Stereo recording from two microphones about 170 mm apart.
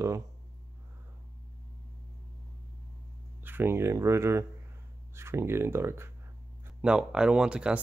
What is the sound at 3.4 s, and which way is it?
Speech, 15° right (ahead or behind).